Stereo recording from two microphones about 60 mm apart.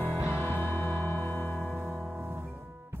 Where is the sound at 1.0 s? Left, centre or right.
Left.